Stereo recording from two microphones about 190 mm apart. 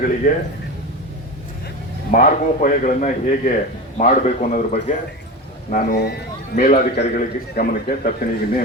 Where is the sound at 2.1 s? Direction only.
45° left (ahead or behind).